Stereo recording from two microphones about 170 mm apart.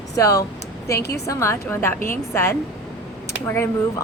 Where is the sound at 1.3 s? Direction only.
15° left (ahead or behind).